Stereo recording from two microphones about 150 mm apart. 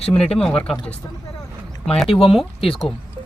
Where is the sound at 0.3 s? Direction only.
5° left (ahead or behind).